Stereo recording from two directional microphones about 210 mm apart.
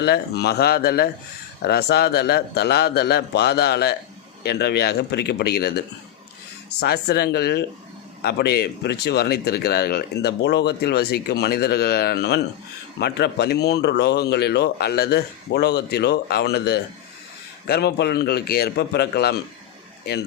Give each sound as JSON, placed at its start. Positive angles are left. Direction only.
{"t": 0.0, "sound": "speech", "side_deg": 50}